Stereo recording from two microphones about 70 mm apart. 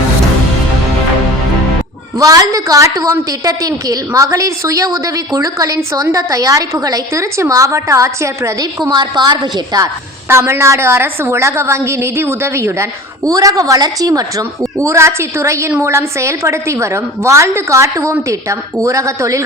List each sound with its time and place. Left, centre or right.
2.1 s a woman's voice: right
7.1 s a woman's voice: right
8.9 s a woman's voice: right
10.2 s a woman's voice: right
13.3 s a woman's voice: right
14.1 s a woman's voice: right